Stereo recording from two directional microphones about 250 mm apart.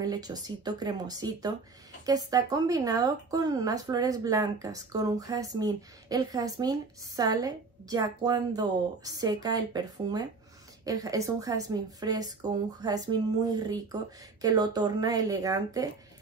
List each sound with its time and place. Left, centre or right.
0.0 s speech: centre